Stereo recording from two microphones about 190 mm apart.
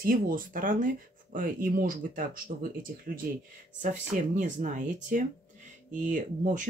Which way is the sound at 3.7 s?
45° right (ahead or behind).